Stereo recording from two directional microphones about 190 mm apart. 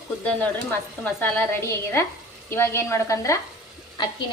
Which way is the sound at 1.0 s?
10° left (ahead or behind).